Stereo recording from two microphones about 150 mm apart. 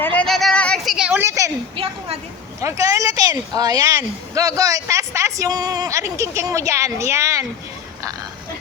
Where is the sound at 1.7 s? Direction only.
40° right (ahead or behind).